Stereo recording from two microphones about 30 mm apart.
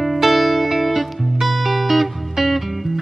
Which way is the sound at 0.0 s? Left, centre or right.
Centre.